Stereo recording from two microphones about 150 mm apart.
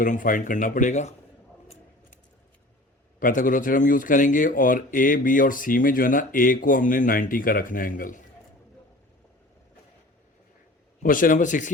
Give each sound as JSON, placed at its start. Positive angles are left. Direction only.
{"t": 0.0, "sound": "speech", "side_deg": 65}
{"t": 1.6, "sound": "a sound", "side_deg": 45}
{"t": 3.2, "sound": "speech", "side_deg": 65}
{"t": 11.0, "sound": "speech", "side_deg": 65}